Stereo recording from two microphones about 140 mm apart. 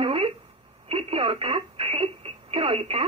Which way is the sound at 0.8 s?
45° right (ahead or behind).